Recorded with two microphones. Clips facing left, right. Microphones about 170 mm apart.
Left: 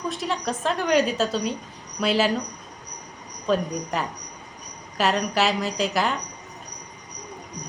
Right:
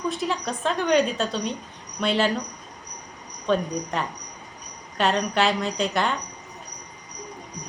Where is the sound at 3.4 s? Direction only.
5° left (ahead or behind).